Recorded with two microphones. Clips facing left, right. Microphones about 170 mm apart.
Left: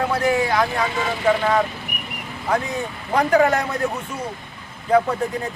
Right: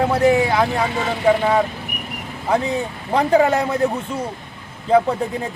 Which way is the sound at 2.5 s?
25° right (ahead or behind).